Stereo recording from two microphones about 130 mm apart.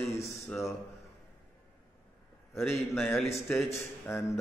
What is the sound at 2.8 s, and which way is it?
Speech, centre (ahead or behind).